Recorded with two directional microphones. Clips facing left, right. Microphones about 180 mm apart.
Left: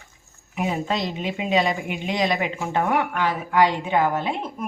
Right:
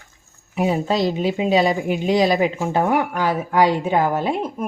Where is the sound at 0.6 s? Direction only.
35° right (ahead or behind).